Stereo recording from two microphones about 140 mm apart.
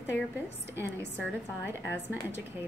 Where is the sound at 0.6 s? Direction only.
20° right (ahead or behind).